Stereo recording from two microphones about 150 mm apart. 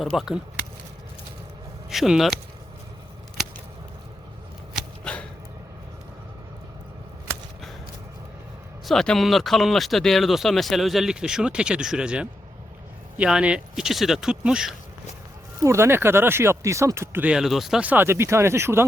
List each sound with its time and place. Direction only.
0.0 s speech: centre (ahead or behind)
1.9 s speech: centre (ahead or behind)
8.9 s speech: centre (ahead or behind)
15.6 s speech: 20° right (ahead or behind)